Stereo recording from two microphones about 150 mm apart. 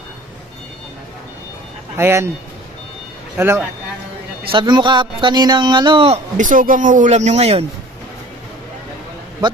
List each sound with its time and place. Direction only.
2.0 s speech: 15° right (ahead or behind)
3.3 s speech: 15° right (ahead or behind)
4.5 s speech: 30° right (ahead or behind)
6.3 s speech: 60° right (ahead or behind); by 7.6 s 45° right (ahead or behind)